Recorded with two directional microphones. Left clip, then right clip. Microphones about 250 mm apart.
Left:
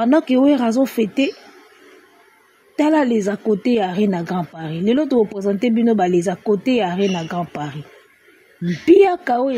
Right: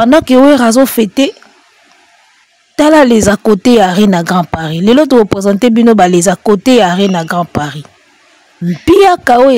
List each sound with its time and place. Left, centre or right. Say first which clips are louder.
0.0 s speech: right 10 dB; right
2.7 s speech: right 11 dB; right
8.8 s speech: right 7 dB; right